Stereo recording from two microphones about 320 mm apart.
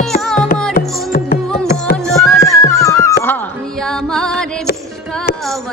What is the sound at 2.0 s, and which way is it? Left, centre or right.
Music, centre.